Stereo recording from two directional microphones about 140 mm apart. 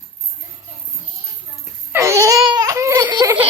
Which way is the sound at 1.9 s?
20° right (ahead or behind).